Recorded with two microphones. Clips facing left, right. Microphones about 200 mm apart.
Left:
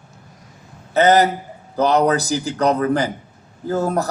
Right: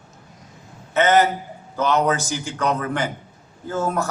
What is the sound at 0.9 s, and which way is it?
A man's voice, 35° left (ahead or behind).